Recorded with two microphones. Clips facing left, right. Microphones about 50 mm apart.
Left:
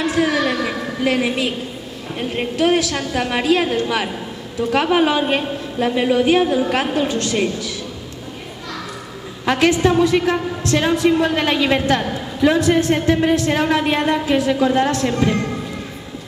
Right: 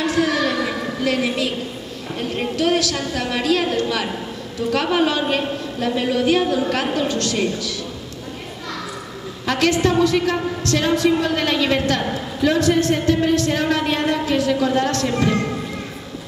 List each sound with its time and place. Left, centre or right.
0.0 s a sound: centre
3.0 s a woman's voice: left
3.6 s a woman's voice: centre
4.7 s a woman's voice: left
9.5 s a woman's voice: left
15.0 s speech: centre